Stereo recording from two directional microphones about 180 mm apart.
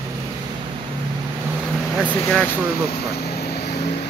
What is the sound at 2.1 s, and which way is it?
Speech, 5° left (ahead or behind).